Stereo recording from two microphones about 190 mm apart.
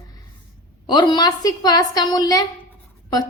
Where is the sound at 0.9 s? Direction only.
25° left (ahead or behind).